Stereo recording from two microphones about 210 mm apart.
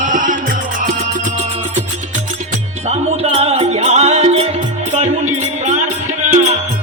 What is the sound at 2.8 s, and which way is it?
Music, 30° right (ahead or behind).